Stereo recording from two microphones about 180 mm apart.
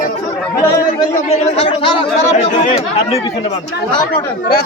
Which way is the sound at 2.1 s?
40° left (ahead or behind).